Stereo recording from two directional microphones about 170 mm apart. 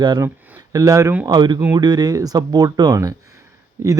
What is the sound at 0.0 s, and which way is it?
Speech, 25° right (ahead or behind).